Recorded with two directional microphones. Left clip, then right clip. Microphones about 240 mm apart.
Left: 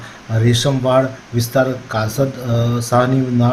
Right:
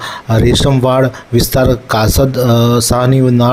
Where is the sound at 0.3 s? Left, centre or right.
Right.